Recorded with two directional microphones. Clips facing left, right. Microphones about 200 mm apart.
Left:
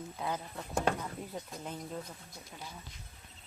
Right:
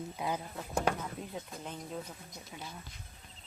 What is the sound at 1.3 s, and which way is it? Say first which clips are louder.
Speech: left 1 dB; centre (ahead or behind).